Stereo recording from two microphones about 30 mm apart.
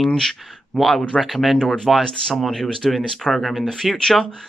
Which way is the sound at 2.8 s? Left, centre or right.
Centre.